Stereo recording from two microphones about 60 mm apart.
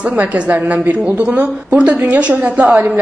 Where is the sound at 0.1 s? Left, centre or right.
Right.